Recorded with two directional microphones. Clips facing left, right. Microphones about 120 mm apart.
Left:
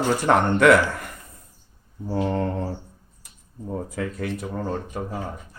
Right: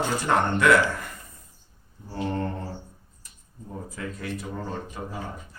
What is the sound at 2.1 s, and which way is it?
Mantra, 90° left.